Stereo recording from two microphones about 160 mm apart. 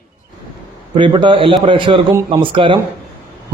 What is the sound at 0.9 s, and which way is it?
A man's voice, 30° right (ahead or behind).